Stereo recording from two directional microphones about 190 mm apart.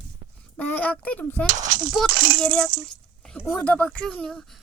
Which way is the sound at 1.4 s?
45° right (ahead or behind).